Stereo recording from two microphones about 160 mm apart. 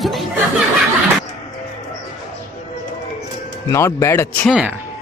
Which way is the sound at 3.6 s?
20° left (ahead or behind).